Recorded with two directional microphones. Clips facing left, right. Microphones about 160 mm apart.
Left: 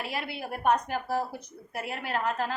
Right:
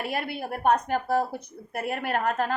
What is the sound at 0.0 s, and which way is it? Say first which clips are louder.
A woman's voice: right 4 dB; 55° right (ahead or behind).